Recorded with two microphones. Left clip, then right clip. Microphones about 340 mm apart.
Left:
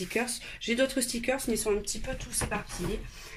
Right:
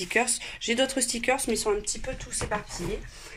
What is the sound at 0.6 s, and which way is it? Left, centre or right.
Speech, centre.